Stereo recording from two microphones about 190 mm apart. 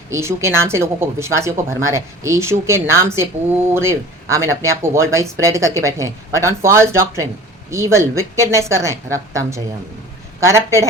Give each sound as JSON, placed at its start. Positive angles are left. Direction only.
{"t": 0.1, "sound": "speech", "side_deg": -15}